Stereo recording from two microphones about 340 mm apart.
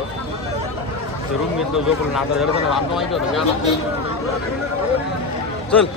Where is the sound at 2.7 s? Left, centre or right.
Centre.